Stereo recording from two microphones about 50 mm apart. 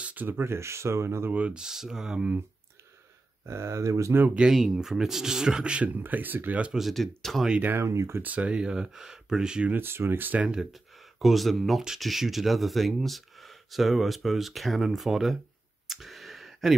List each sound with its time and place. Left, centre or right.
0.0 s a sound: right
0.3 s speech: right
1.5 s speech: centre
3.4 s speech: right
4.5 s speech: centre
5.9 s speech: right
6.9 s speech: centre
7.8 s speech: right
8.2 s speech: right
9.7 s speech: right
10.4 s speech: centre
10.7 s speech: centre
15.9 s a sound: centre